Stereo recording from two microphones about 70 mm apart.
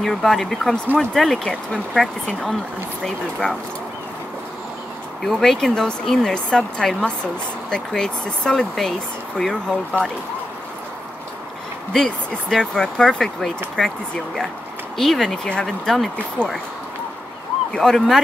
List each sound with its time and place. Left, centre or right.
0.0 s speech: centre
5.2 s speech: centre
11.9 s speech: centre
16.4 s speech: centre
17.7 s speech: centre